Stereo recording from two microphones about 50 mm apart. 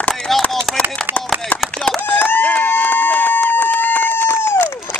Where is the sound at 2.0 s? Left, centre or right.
Left.